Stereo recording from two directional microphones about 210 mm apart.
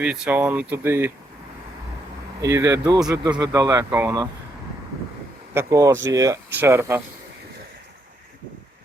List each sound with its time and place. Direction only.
0.0 s speech: 5° right (ahead or behind)
2.4 s speech: 15° right (ahead or behind)
5.5 s speech: 15° right (ahead or behind)